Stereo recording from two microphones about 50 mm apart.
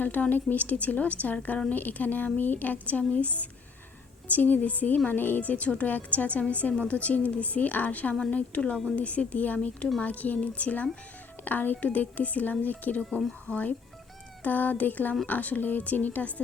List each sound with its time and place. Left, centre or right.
0.0 s speech: left
4.3 s speech: left